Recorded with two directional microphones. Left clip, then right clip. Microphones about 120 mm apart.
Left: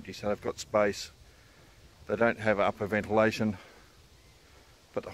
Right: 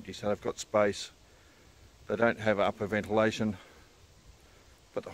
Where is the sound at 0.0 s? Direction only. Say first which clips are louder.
Even; 5° right (ahead or behind).